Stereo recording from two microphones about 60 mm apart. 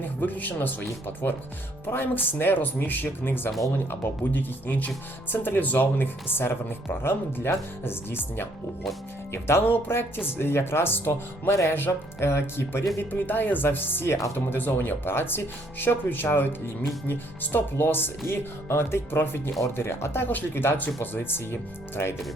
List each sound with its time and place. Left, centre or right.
0.2 s speech: left
11.7 s speech: left